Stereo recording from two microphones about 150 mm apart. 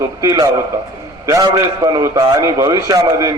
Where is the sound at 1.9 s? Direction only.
25° right (ahead or behind).